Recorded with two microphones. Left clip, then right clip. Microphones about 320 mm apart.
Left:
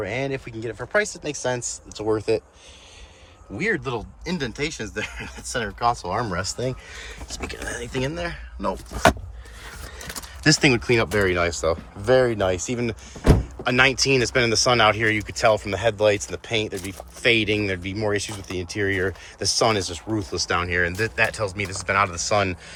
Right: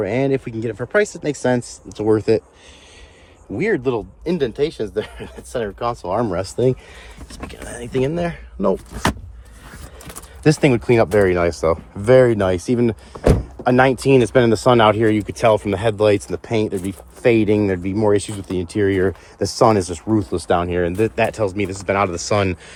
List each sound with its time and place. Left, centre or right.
0.0 s speech: centre
3.6 s speech: centre
7.0 s speech: centre
10.4 s speech: centre